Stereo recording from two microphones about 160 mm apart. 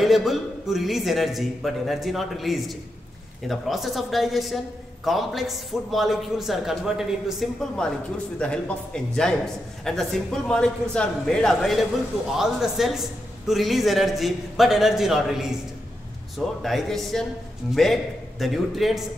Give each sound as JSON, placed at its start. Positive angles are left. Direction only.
{"t": 0.0, "sound": "a man's voice", "side_deg": 0}